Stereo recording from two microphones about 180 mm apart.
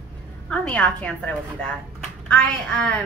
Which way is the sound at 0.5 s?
5° left (ahead or behind).